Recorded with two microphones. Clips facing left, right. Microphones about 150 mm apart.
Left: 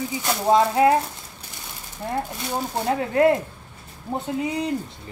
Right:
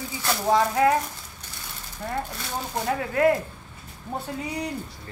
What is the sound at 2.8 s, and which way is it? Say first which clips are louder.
Speech: left 3 dB; 25° left (ahead or behind).